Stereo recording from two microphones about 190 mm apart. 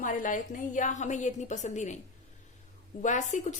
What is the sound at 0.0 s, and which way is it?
A woman's voice, 45° left (ahead or behind).